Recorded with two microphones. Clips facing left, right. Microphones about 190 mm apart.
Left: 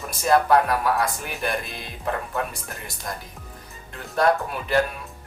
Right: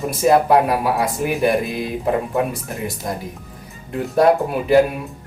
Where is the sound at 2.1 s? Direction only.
15° right (ahead or behind).